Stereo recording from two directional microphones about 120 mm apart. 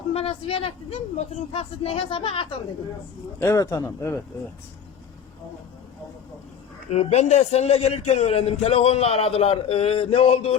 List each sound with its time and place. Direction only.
0.1 s a man's voice: 55° left (ahead or behind)
3.4 s speech: 30° left (ahead or behind)
6.9 s a man's voice: 65° left (ahead or behind)